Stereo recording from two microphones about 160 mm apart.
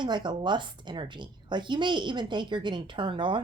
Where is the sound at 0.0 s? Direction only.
30° right (ahead or behind).